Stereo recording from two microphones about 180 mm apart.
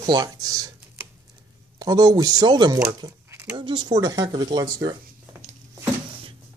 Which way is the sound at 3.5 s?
25° right (ahead or behind).